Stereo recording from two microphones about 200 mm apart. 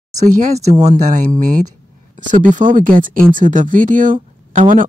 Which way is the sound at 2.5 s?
40° right (ahead or behind).